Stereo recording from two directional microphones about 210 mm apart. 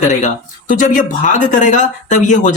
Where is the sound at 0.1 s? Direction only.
35° left (ahead or behind).